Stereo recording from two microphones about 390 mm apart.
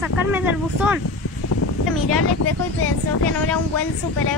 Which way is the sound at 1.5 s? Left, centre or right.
Left.